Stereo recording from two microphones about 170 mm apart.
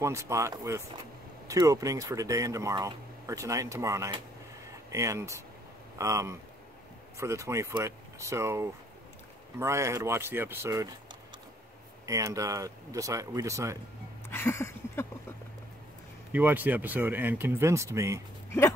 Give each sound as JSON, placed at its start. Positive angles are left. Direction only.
{"t": 0.0, "sound": "speech", "side_deg": -15}
{"t": 14.3, "sound": "a sound", "side_deg": 15}
{"t": 16.3, "sound": "speech", "side_deg": -10}